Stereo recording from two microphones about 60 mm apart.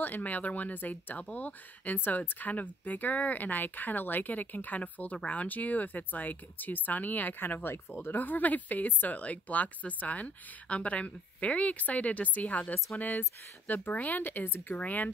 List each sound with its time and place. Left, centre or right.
0.0 s speech: left